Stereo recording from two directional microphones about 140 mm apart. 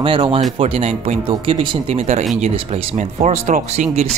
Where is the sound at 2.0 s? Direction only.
55° right (ahead or behind).